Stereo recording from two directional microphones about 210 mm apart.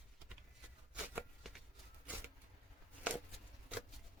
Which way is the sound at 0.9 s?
5° right (ahead or behind).